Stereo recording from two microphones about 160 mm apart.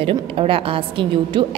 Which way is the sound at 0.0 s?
35° right (ahead or behind).